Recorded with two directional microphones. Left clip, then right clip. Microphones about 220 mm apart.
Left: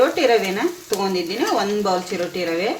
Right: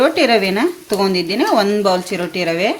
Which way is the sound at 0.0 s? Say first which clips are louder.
Right 3 dB; 50° right (ahead or behind).